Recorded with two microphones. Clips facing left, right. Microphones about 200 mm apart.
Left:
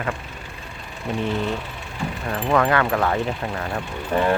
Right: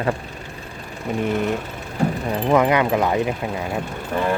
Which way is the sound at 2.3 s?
20° right (ahead or behind).